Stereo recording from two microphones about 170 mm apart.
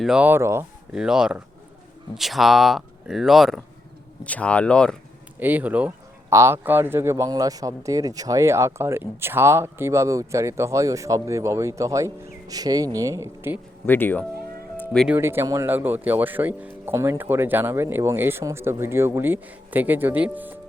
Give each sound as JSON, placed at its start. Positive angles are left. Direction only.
{"t": 0.0, "sound": "a man's voice", "side_deg": -5}
{"t": 0.9, "sound": "speech", "side_deg": -5}
{"t": 5.4, "sound": "a man's voice", "side_deg": -10}
{"t": 13.8, "sound": "speech", "side_deg": 10}
{"t": 15.0, "sound": "a man's voice", "side_deg": -10}